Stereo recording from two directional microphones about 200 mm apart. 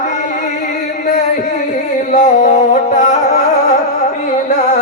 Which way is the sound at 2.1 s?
35° left (ahead or behind).